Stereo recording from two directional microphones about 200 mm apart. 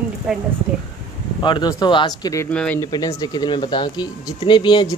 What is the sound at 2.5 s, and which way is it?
Speech, 5° left (ahead or behind).